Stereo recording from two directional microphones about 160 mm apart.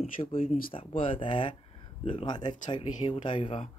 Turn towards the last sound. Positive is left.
turn(degrees=35)  # may be behind; listen again after turning